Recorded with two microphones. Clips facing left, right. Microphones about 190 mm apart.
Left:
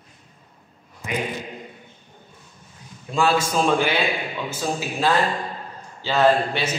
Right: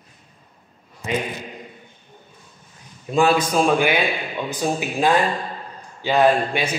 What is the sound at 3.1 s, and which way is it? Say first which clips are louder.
A man's voice: right 3 dB; 20° right (ahead or behind).